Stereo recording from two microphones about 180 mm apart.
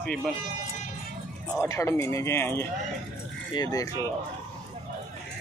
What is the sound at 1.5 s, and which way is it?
A man's voice, 15° left (ahead or behind).